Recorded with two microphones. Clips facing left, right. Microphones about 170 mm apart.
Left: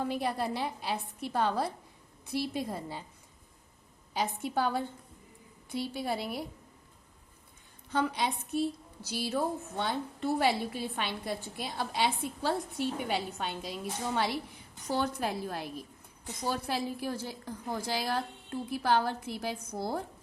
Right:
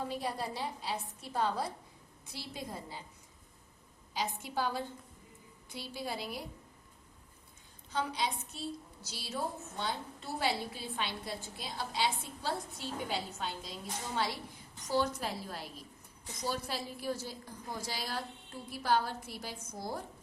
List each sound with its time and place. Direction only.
0.1 s a woman's voice: 65° left (ahead or behind)
4.1 s a woman's voice: 55° left (ahead or behind)
7.9 s a woman's voice: 60° left (ahead or behind)
14.8 s a woman's voice: 60° left (ahead or behind)